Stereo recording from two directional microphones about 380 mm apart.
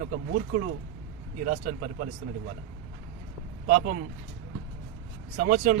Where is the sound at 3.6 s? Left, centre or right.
Right.